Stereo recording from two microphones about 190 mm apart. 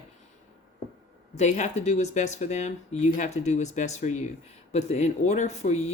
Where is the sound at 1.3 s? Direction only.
40° left (ahead or behind).